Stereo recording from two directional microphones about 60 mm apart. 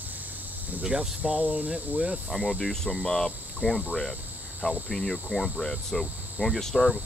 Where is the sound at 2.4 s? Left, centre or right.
Centre.